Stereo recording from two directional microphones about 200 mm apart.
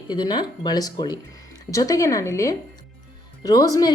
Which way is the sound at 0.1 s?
20° left (ahead or behind).